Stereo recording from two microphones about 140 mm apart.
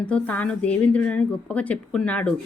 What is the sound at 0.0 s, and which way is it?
A woman's voice, 10° left (ahead or behind).